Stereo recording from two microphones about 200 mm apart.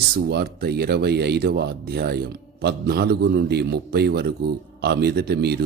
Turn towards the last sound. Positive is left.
turn(degrees=-50)  # may be behind; listen again after turning